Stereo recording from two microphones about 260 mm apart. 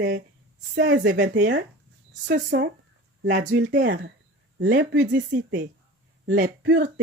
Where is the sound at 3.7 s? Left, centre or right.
Right.